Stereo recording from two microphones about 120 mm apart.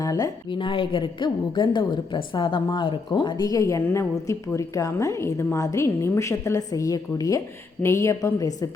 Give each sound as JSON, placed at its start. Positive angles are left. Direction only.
{"t": 0.0, "sound": "a woman's voice", "side_deg": 30}
{"t": 0.5, "sound": "a woman's voice", "side_deg": 45}